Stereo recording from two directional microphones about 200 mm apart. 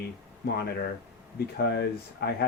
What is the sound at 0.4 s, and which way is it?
Speech, 55° left (ahead or behind).